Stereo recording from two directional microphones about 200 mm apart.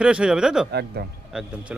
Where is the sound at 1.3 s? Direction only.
5° right (ahead or behind).